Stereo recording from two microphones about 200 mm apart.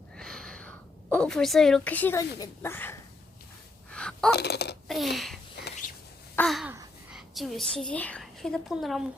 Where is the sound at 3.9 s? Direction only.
5° left (ahead or behind).